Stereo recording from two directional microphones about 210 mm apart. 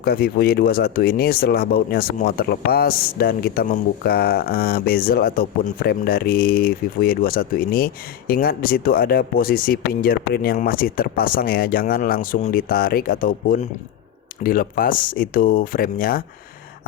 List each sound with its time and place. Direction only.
0.0 s speech: 45° left (ahead or behind)